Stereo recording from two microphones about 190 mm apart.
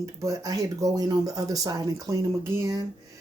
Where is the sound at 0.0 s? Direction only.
15° right (ahead or behind).